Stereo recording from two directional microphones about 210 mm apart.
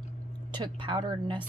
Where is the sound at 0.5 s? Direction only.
25° right (ahead or behind).